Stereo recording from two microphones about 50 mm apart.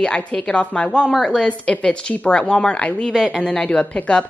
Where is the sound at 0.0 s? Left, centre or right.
Centre.